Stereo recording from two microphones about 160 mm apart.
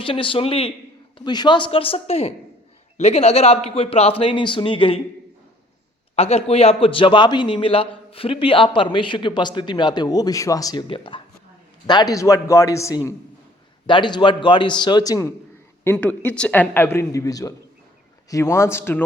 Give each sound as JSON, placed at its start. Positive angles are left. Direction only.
{"t": 0.0, "sound": "a man's voice", "side_deg": 35}
{"t": 6.1, "sound": "a man's voice", "side_deg": 40}
{"t": 15.8, "sound": "speech", "side_deg": 10}